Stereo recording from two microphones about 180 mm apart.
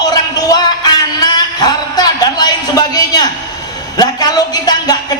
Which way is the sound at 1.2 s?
20° left (ahead or behind).